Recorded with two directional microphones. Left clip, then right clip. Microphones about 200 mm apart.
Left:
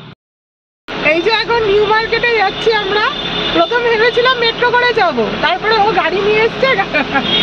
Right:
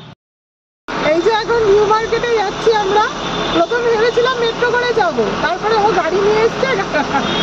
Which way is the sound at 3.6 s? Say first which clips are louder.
Left 2 dB; 20° left (ahead or behind).